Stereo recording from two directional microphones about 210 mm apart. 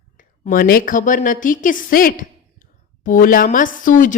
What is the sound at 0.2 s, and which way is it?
A woman's voice, 40° left (ahead or behind).